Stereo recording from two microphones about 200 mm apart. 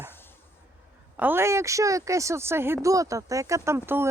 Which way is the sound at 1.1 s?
10° right (ahead or behind).